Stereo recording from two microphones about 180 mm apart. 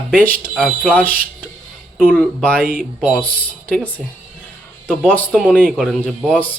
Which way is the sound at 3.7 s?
10° left (ahead or behind).